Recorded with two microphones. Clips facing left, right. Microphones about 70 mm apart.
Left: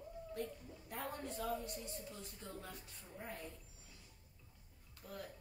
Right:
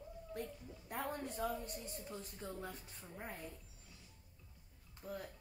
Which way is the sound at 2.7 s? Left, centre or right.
Right.